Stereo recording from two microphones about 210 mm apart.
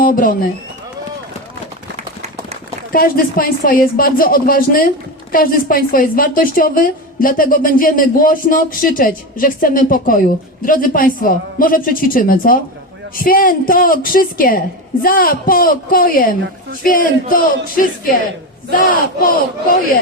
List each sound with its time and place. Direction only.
0.0 s a woman's voice: 40° left (ahead or behind)
2.9 s a woman's voice: 45° left (ahead or behind)
18.9 s speech: 45° left (ahead or behind)